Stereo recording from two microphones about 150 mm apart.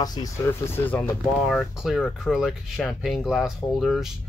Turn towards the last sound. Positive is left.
turn(degrees=0)  # may be behind; listen again after turning